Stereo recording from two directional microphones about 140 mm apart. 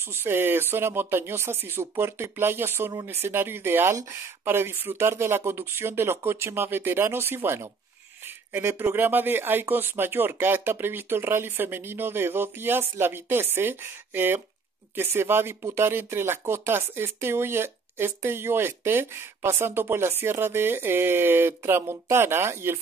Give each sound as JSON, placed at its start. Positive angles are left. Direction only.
{"t": 0.0, "sound": "speech", "side_deg": -15}